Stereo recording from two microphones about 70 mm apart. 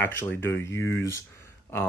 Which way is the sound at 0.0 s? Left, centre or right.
Left.